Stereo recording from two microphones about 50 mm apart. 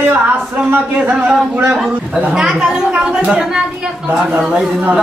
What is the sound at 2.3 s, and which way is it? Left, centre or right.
Speech, centre.